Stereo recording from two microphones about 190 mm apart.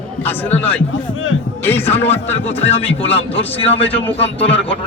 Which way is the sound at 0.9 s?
90° left.